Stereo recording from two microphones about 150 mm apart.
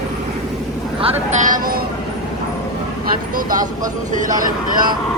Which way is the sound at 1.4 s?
65° right (ahead or behind).